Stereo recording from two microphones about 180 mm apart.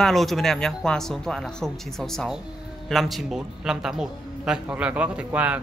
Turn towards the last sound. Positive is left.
turn(degrees=-5)  # may be behind; listen again after turning